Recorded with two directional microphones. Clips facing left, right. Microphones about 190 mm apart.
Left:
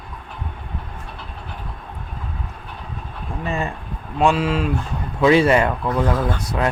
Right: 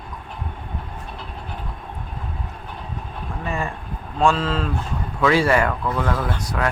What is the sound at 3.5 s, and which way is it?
Speech, 20° left (ahead or behind).